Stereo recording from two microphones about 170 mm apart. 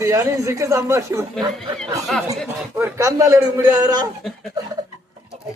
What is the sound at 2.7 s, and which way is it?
A man's voice, 15° right (ahead or behind).